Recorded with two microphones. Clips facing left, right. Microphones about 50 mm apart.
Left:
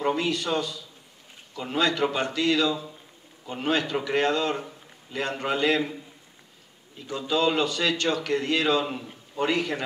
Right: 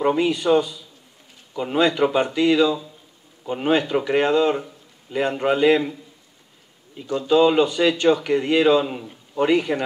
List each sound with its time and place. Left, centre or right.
0.0 s a man's voice: centre
7.2 s a man's voice: centre